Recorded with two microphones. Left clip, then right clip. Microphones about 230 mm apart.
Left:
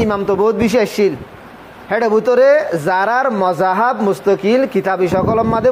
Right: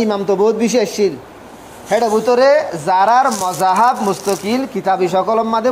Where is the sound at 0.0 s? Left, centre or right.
Left.